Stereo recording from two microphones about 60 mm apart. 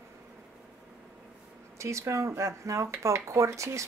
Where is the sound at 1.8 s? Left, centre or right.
Right.